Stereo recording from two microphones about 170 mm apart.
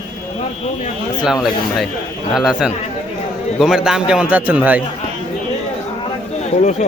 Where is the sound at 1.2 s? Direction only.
Centre (ahead or behind).